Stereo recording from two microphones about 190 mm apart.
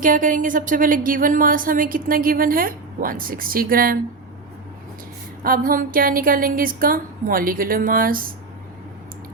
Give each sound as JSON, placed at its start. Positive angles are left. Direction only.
{"t": 0.0, "sound": "a woman's voice", "side_deg": -45}
{"t": 5.4, "sound": "a woman's voice", "side_deg": -50}